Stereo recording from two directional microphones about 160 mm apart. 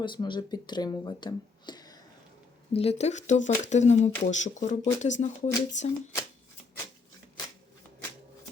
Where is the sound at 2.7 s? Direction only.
40° left (ahead or behind).